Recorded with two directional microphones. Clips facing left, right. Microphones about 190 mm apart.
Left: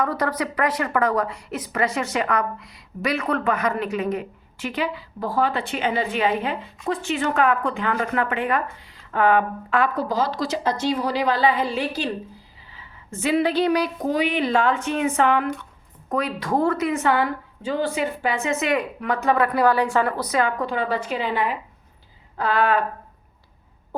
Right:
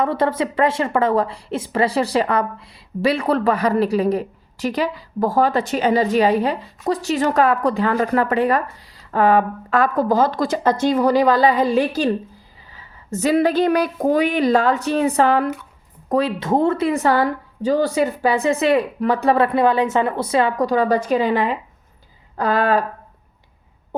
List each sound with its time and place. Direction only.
0.0 s a woman's voice: 25° right (ahead or behind); by 21.3 s 40° right (ahead or behind)
22.4 s a woman's voice: 40° right (ahead or behind)